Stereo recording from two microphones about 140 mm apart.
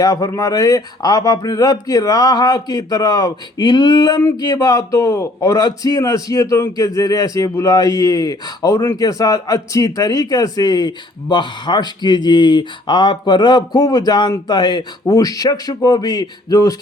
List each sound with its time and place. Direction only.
0.0 s a man's voice: 25° left (ahead or behind)